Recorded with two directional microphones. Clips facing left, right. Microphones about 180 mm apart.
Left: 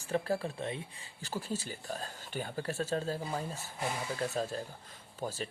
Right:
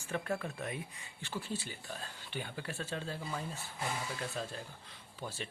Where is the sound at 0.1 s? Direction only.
35° left (ahead or behind).